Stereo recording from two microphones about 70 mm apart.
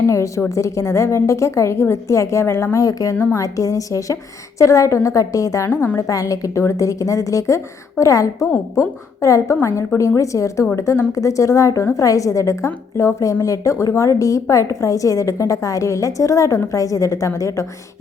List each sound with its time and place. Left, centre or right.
0.1 s a woman's voice: left
5.6 s a woman's voice: left
6.0 s a woman's voice: left